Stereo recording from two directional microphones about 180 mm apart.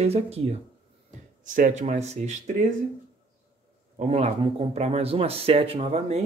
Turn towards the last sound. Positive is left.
turn(degrees=-35)  # may be behind; listen again after turning